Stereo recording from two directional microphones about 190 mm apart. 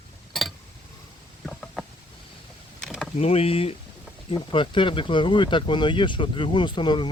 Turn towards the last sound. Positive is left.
turn(degrees=25)  # may be behind; listen again after turning